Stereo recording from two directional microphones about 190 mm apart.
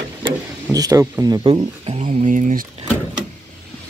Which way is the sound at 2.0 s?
40° right (ahead or behind).